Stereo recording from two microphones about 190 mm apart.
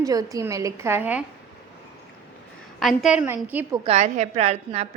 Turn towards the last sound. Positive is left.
turn(degrees=-35)  # may be behind; listen again after turning